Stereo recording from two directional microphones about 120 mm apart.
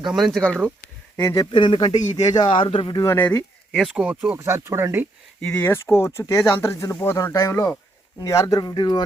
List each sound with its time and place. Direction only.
0.0 s speech: centre (ahead or behind)
1.1 s speech: 25° left (ahead or behind)
1.5 s speech: 40° left (ahead or behind)
3.0 s speech: 20° left (ahead or behind)
3.7 s speech: centre (ahead or behind)
3.9 s speech: 10° right (ahead or behind)
4.4 s speech: 20° right (ahead or behind)
5.4 s speech: 10° left (ahead or behind); by 9.0 s 35° left (ahead or behind)